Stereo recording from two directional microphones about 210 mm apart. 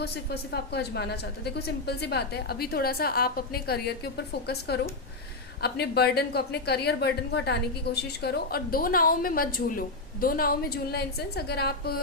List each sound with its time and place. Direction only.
0.0 s a woman's voice: 50° left (ahead or behind)